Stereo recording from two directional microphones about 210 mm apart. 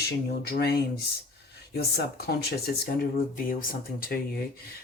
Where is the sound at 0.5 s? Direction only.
50° left (ahead or behind).